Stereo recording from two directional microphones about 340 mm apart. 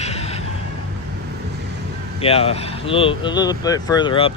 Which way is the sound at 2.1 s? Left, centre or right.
Centre.